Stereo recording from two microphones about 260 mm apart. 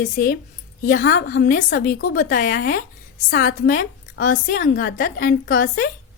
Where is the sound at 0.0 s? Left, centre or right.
Left.